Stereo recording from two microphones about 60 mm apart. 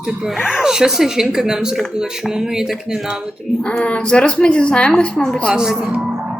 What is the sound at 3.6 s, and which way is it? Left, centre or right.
A woman's voice, centre.